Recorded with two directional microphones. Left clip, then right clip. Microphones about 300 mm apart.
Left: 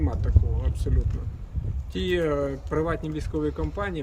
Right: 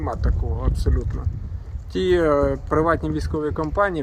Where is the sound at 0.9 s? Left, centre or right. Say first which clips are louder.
Right 6 dB; centre.